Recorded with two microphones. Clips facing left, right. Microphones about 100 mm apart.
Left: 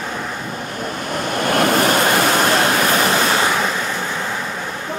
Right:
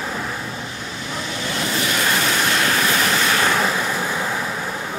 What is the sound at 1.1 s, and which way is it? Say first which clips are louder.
Waves: left 8 dB; 55° left (ahead or behind).